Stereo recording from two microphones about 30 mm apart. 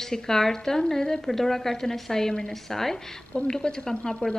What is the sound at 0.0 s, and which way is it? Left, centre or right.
Speech, centre.